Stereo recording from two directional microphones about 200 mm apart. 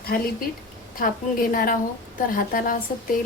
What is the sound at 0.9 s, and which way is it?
A woman's voice, 45° left (ahead or behind).